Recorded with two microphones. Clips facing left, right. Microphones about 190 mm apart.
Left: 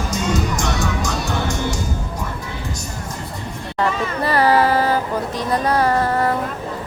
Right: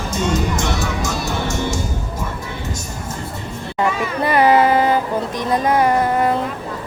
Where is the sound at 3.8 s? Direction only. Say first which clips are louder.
Right 1 dB; 15° right (ahead or behind).